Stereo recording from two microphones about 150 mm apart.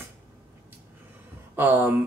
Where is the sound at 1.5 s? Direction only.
15° right (ahead or behind).